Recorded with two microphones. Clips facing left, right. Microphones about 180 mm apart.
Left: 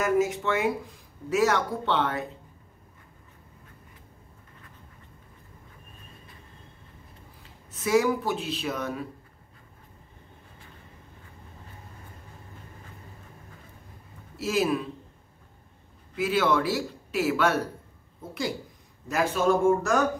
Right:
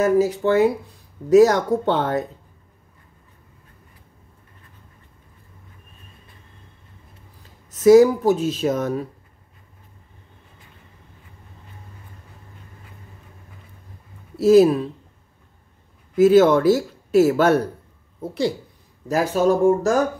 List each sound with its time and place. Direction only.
0.0 s speech: 35° right (ahead or behind)
7.4 s speech: 40° right (ahead or behind)
14.3 s speech: 40° right (ahead or behind)
16.2 s speech: 40° right (ahead or behind)
19.0 s speech: 40° right (ahead or behind)